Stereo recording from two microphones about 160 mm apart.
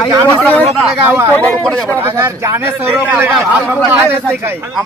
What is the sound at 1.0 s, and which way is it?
Speech, 15° right (ahead or behind).